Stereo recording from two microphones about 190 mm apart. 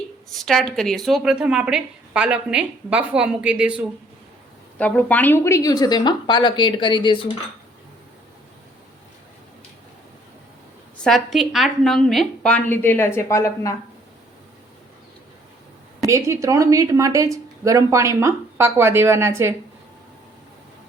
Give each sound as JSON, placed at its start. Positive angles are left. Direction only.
{"t": 0.3, "sound": "a woman's voice", "side_deg": 0}
{"t": 4.8, "sound": "a woman's voice", "side_deg": 10}
{"t": 11.0, "sound": "a woman's voice", "side_deg": 0}
{"t": 16.0, "sound": "speech", "side_deg": -15}